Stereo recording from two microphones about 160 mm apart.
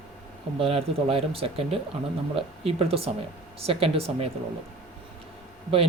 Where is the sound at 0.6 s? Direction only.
40° right (ahead or behind).